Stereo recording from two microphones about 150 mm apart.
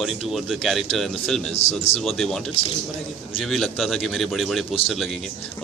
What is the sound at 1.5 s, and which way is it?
Speech, 40° left (ahead or behind).